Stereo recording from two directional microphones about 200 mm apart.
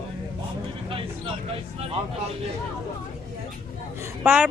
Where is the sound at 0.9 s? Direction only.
25° right (ahead or behind).